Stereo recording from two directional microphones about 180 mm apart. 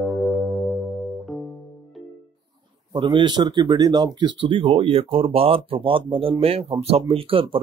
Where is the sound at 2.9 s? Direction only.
25° right (ahead or behind).